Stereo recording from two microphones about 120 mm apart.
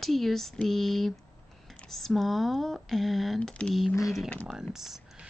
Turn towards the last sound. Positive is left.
turn(degrees=-5)  # may be behind; listen again after turning